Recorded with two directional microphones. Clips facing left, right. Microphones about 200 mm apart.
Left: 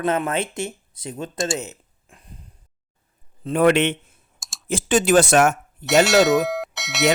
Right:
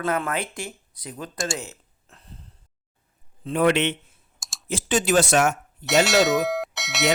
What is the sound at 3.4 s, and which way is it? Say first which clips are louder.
Speech: left 4 dB; 50° left (ahead or behind).